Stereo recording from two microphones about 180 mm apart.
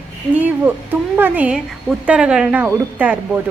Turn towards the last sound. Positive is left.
turn(degrees=-10)  # may be behind; listen again after turning